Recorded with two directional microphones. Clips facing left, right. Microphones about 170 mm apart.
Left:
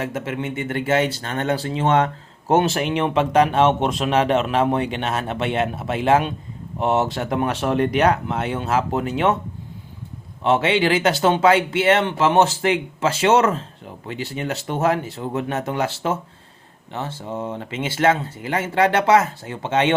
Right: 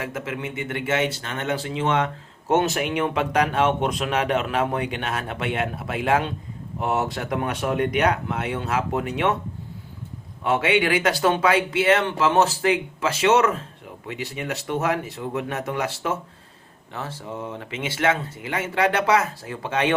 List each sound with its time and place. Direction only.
0.0 s speech: 30° left (ahead or behind)
10.4 s speech: 25° left (ahead or behind)